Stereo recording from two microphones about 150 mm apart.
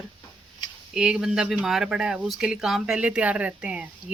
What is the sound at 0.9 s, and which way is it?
Speech, 5° right (ahead or behind).